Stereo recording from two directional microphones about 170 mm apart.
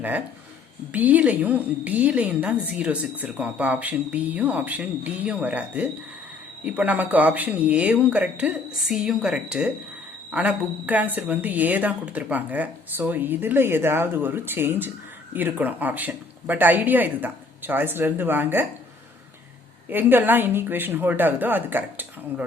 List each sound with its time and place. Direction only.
0.9 s a woman's voice: 10° right (ahead or behind)
19.9 s a woman's voice: 10° right (ahead or behind)